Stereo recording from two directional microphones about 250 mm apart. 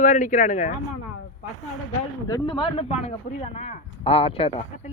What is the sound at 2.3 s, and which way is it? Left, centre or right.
Speech, centre.